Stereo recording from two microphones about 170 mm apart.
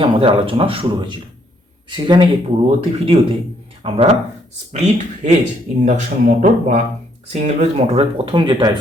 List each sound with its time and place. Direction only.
0.0 s speech: 35° right (ahead or behind)